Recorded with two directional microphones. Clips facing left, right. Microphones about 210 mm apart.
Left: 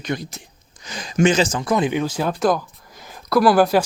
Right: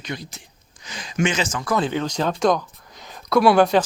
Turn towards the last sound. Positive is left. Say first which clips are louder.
# even
turn(degrees=5)  # may be behind; listen again after turning